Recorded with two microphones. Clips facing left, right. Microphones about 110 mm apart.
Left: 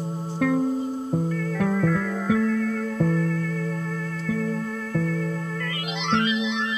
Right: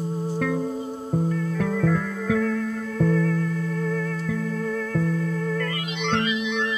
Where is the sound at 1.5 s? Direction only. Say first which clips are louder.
Left 4 dB; 40° left (ahead or behind).